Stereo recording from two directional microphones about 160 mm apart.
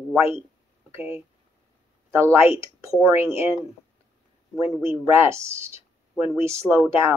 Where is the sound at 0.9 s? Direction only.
15° right (ahead or behind).